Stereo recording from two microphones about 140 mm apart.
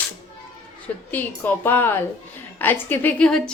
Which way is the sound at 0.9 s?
10° left (ahead or behind).